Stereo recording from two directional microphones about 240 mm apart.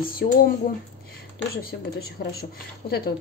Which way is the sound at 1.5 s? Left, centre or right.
Left.